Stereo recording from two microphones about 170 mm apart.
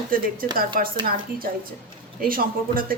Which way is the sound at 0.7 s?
55° right (ahead or behind).